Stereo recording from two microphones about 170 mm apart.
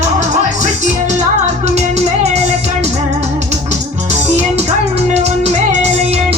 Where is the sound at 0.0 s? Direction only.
45° right (ahead or behind).